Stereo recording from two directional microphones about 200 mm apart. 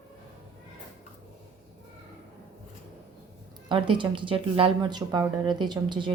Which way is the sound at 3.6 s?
25° right (ahead or behind).